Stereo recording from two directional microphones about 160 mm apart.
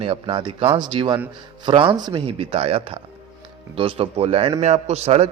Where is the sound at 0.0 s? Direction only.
35° right (ahead or behind).